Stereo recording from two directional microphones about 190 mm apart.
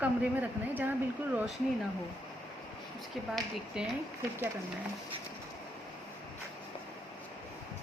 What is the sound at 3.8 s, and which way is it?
Speech, 5° right (ahead or behind).